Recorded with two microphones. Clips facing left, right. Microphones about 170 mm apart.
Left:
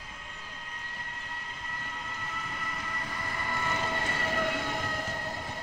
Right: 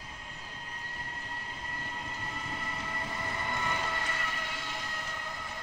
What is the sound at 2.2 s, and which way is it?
Train, 25° right (ahead or behind).